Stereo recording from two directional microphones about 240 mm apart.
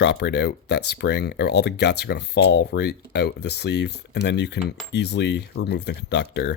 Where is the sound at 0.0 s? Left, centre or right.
Left.